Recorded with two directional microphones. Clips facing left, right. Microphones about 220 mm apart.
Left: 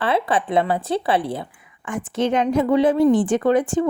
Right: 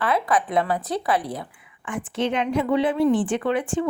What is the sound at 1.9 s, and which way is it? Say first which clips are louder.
A woman's voice: left 4 dB; 45° left (ahead or behind).